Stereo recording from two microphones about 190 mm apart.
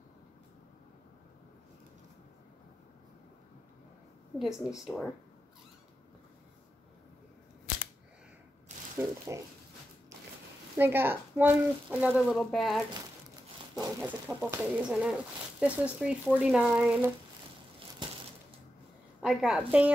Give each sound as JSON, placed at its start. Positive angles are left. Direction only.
{"t": 4.4, "sound": "speech", "side_deg": 0}
{"t": 8.7, "sound": "a sound", "side_deg": -40}
{"t": 9.3, "sound": "speech", "side_deg": -15}
{"t": 10.8, "sound": "speech", "side_deg": -10}
{"t": 12.3, "sound": "speech", "side_deg": 5}
{"t": 13.9, "sound": "speech", "side_deg": -5}
{"t": 19.2, "sound": "speech", "side_deg": -5}